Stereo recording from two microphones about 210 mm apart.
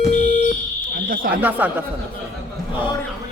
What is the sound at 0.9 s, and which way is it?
Fire alarm, 40° right (ahead or behind).